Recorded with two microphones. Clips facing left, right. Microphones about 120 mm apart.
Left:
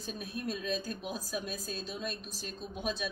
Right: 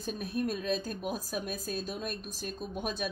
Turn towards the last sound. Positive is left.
turn(degrees=-50)  # may be behind; listen again after turning